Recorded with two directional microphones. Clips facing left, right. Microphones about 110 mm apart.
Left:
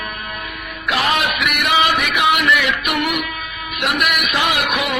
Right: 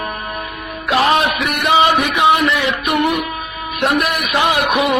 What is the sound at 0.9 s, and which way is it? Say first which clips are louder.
A man's voice: right 5 dB; 30° right (ahead or behind).